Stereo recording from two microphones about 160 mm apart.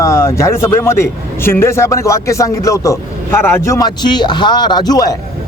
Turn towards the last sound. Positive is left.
turn(degrees=25)  # may be behind; listen again after turning